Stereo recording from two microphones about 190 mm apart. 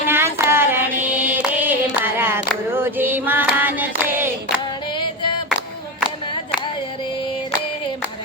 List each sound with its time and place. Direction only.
0.1 s child singing: 10° right (ahead or behind)
4.9 s music: 25° left (ahead or behind)